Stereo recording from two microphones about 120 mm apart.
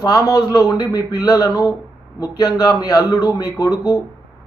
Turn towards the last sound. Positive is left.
turn(degrees=30)  # may be behind; listen again after turning